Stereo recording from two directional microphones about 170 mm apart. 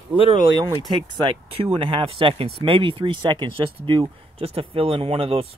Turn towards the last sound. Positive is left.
turn(degrees=-35)  # may be behind; listen again after turning